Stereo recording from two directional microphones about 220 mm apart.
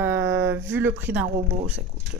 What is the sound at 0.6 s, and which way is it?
A woman's voice, 10° right (ahead or behind).